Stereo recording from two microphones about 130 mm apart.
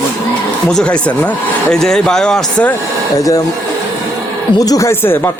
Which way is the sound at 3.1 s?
25° left (ahead or behind).